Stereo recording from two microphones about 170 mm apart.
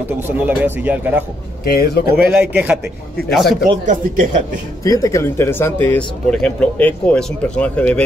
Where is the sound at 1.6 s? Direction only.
65° left (ahead or behind).